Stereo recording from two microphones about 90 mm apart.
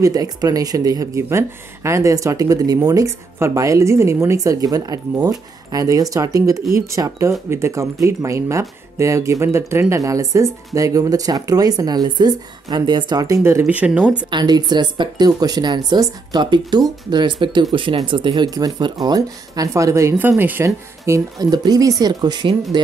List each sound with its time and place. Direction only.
0.0 s speech: 45° right (ahead or behind)
13.4 s speech: 30° right (ahead or behind)
13.7 s speech: 15° right (ahead or behind)
14.3 s speech: 50° right (ahead or behind); by 20.2 s 35° right (ahead or behind)
20.2 s speech: 25° right (ahead or behind)
20.6 s speech: 35° right (ahead or behind); by 22.8 s 55° right (ahead or behind)